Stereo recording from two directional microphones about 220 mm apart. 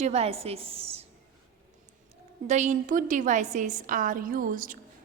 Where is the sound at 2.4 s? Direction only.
30° right (ahead or behind).